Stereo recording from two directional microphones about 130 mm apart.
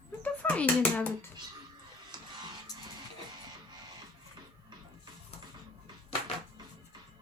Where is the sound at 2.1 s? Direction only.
35° right (ahead or behind).